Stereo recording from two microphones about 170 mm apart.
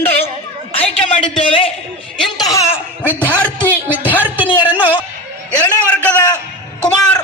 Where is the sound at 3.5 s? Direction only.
10° right (ahead or behind).